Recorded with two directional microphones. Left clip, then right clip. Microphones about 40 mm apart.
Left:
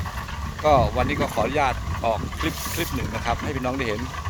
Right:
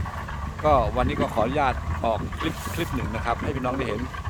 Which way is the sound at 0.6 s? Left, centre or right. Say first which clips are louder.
Left 2 dB; centre.